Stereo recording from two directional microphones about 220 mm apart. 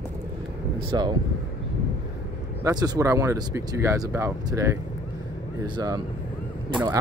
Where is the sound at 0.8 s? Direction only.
20° right (ahead or behind).